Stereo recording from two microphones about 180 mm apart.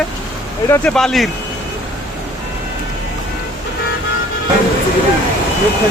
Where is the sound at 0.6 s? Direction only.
15° left (ahead or behind).